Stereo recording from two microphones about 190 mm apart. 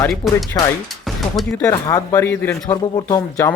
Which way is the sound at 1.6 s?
20° left (ahead or behind).